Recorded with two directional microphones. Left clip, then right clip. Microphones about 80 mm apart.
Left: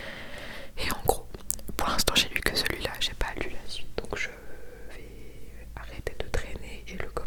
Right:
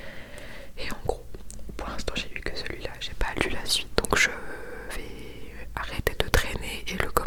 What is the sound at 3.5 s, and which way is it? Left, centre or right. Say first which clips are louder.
Whispering: right 12 dB; right.